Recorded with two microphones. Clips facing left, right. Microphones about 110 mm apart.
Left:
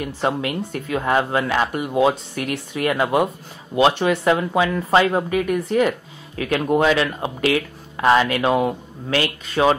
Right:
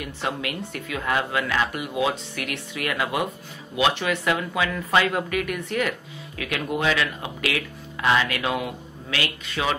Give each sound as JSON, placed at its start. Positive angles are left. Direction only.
{"t": 0.0, "sound": "speech", "side_deg": 35}